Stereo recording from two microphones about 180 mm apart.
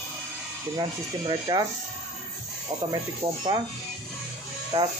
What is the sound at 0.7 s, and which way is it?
Speech, 25° right (ahead or behind).